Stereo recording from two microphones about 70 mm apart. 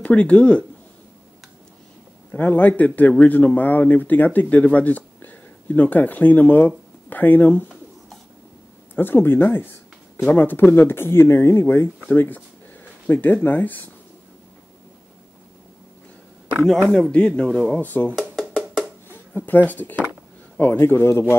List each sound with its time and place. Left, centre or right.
0.0 s speech: centre
2.3 s speech: left
8.9 s speech: left
12.1 s speech: left
16.5 s speech: centre; by 18.1 s left
18.5 s wood block: centre
19.0 s speech: left